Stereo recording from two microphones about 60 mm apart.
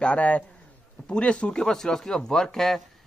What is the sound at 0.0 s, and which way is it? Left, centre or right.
A man's voice, left.